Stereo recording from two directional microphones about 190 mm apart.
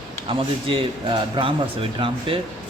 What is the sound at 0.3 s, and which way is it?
Speech, 30° right (ahead or behind).